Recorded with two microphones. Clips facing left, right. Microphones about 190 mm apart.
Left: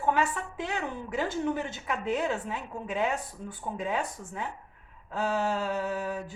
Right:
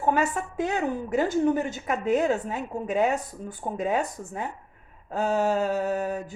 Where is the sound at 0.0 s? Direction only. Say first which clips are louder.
Right 3 dB; 45° right (ahead or behind).